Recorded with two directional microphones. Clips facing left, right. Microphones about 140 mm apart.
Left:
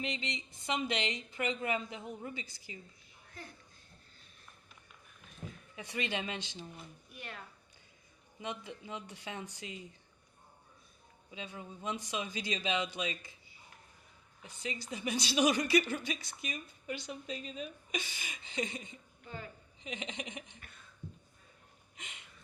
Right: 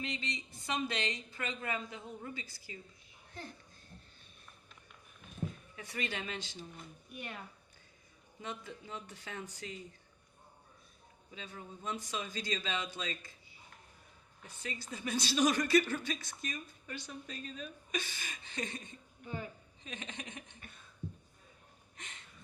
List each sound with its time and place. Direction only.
0.0 s a woman's voice: 25° left (ahead or behind)
5.7 s a woman's voice: 20° left (ahead or behind)
7.1 s speech: 15° right (ahead or behind)
8.4 s a woman's voice: 20° left (ahead or behind)
11.3 s a woman's voice: 15° left (ahead or behind)
14.4 s a woman's voice: 15° left (ahead or behind)
19.2 s a woman's voice: 15° right (ahead or behind)
19.8 s a woman's voice: 15° left (ahead or behind)
21.9 s a sound: 10° left (ahead or behind)